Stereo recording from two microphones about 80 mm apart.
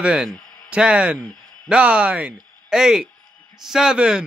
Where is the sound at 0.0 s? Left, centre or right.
Centre.